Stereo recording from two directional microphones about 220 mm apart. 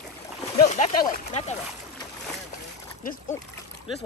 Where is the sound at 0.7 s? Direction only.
30° left (ahead or behind).